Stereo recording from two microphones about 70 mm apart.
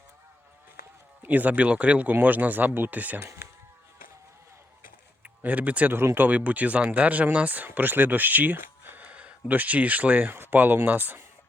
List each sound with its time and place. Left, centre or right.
1.2 s speech: right
5.4 s speech: right